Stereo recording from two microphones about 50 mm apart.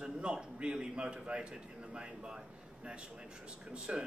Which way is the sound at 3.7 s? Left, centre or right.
Centre.